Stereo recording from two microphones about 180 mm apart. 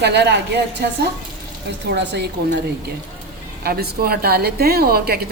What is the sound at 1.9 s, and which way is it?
Speech, 65° right (ahead or behind).